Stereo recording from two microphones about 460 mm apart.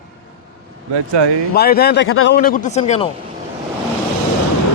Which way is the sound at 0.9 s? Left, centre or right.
Right.